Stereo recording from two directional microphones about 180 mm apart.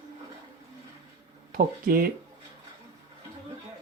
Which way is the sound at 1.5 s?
50° right (ahead or behind).